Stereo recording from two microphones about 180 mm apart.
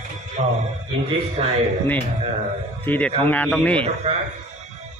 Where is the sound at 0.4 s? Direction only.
40° right (ahead or behind).